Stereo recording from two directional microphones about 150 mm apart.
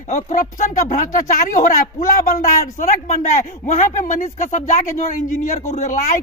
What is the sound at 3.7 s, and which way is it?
Speech, 55° left (ahead or behind).